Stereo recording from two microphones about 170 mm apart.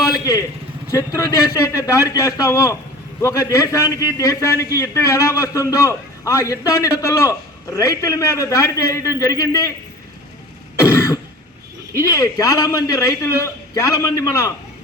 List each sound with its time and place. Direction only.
0.0 s vehicle: 20° left (ahead or behind)
0.9 s a man's voice: 20° left (ahead or behind)
10.8 s cough: 20° left (ahead or behind)
11.9 s a man's voice: 20° left (ahead or behind)